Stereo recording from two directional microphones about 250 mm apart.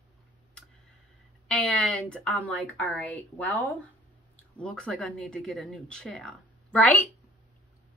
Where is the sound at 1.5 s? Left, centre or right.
Centre.